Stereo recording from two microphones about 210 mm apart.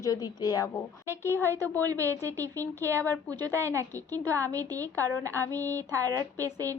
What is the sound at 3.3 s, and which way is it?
A woman's voice, 15° right (ahead or behind).